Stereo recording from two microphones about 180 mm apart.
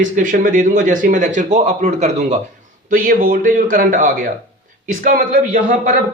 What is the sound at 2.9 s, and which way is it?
A man's voice, 50° right (ahead or behind).